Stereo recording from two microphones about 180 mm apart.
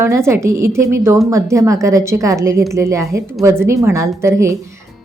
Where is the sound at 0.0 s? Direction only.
15° right (ahead or behind).